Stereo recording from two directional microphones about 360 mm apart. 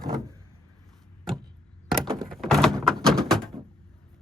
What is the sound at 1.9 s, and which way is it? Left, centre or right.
Door, centre.